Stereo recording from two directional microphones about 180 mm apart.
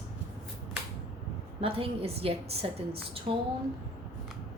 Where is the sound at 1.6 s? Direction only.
30° right (ahead or behind).